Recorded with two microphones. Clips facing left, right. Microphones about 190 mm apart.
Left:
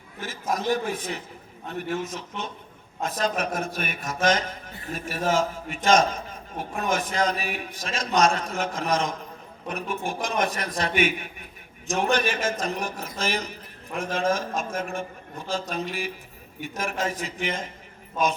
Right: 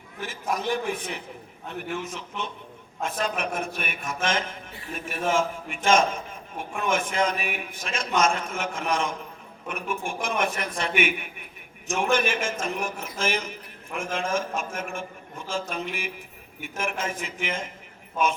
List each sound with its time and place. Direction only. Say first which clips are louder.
0.2 s a man's voice: left 1 dB; 40° left (ahead or behind)